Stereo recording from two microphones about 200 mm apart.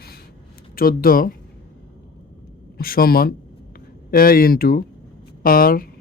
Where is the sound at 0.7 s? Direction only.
45° left (ahead or behind).